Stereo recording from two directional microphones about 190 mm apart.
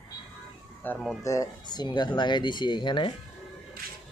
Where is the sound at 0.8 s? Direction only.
10° left (ahead or behind); by 3.2 s 25° left (ahead or behind).